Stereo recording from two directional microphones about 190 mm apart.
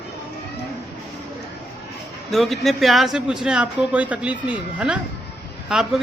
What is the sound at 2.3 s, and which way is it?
A man's voice, centre (ahead or behind).